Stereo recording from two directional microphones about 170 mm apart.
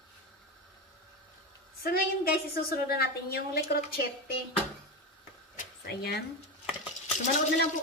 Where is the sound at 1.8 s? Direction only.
65° left (ahead or behind).